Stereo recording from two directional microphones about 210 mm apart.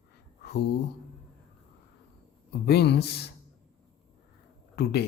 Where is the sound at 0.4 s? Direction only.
50° left (ahead or behind).